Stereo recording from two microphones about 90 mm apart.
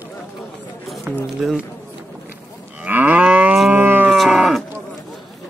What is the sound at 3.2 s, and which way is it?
Livestock, 15° right (ahead or behind).